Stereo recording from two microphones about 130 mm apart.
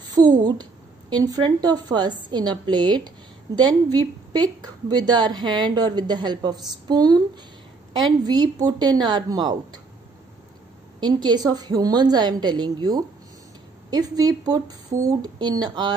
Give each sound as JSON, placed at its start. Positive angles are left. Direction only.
{"t": 0.1, "sound": "a woman's voice", "side_deg": -30}
{"t": 8.2, "sound": "a woman's voice", "side_deg": -30}
{"t": 11.0, "sound": "a woman's voice", "side_deg": -35}